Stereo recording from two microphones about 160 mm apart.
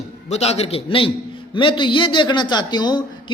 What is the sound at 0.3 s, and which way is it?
A man's voice, 40° left (ahead or behind).